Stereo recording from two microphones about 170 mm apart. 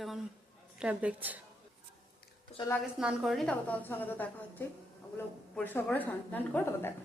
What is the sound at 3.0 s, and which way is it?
A woman's voice, centre (ahead or behind).